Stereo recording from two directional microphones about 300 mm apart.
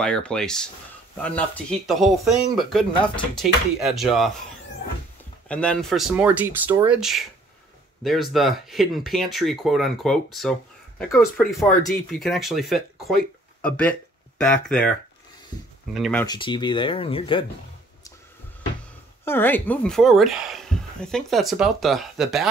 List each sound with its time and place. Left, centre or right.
0.0 s speech: centre
5.5 s speech: centre
19.2 s speech: centre